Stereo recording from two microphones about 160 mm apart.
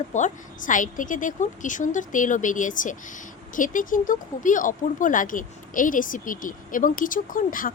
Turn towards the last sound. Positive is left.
turn(degrees=60)  # may be behind; listen again after turning